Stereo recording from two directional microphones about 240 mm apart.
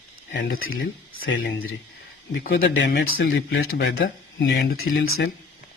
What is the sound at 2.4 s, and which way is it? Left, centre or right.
Speech, left.